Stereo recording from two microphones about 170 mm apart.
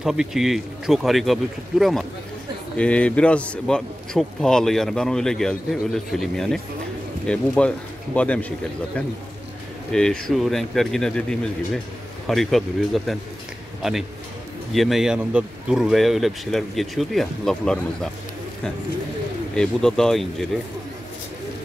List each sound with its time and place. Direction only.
0.0 s a man's voice: 5° right (ahead or behind)
9.9 s a man's voice: 5° left (ahead or behind)
14.7 s a man's voice: centre (ahead or behind)
19.5 s a man's voice: 5° left (ahead or behind)